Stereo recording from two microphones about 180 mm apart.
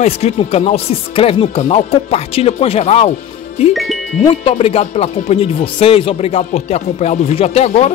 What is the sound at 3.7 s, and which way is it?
Music, centre (ahead or behind).